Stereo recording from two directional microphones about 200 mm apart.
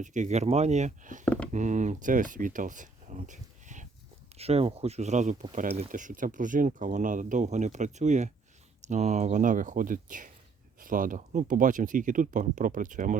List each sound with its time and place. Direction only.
0.0 s speech: 40° right (ahead or behind)
1.2 s a sound: 5° left (ahead or behind)
1.5 s speech: 40° right (ahead or behind)